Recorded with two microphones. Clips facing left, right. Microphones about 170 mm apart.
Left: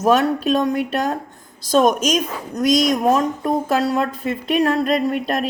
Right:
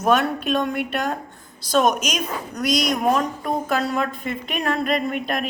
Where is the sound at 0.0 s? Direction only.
40° left (ahead or behind).